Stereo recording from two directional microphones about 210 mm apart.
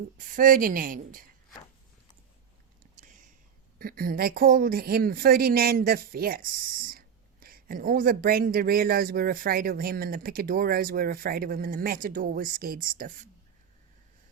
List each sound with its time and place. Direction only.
0.2 s a woman's voice: 40° right (ahead or behind)
2.9 s a sound: 35° right (ahead or behind)
3.8 s a woman's voice: 45° right (ahead or behind)